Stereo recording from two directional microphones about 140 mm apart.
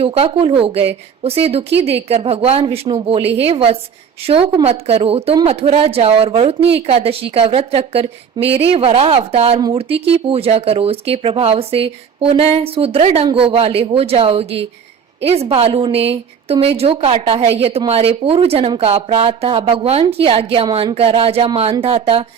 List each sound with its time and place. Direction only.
0.0 s a woman's voice: 45° right (ahead or behind)